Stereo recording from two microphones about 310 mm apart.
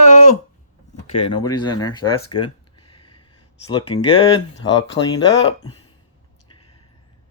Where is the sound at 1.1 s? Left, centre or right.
Centre.